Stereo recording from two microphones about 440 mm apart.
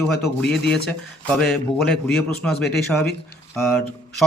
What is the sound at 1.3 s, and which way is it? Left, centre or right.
Speech, centre.